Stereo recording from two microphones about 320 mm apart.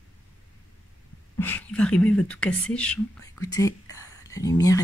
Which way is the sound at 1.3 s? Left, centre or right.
Centre.